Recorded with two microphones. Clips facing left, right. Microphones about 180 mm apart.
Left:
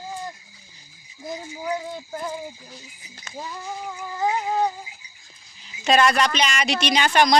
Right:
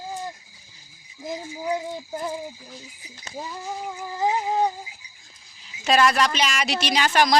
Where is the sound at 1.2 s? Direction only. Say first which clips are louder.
Right 1 dB; 20° right (ahead or behind).